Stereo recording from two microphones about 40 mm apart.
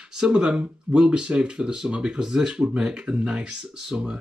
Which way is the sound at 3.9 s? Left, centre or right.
Right.